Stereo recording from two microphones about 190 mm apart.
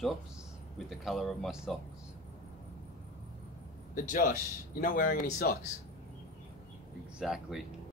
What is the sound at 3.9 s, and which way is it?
Speech, 45° left (ahead or behind).